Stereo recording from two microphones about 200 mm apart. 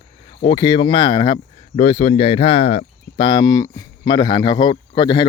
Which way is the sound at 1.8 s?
35° left (ahead or behind).